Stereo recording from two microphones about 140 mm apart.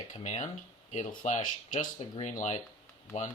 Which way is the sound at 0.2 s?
50° left (ahead or behind).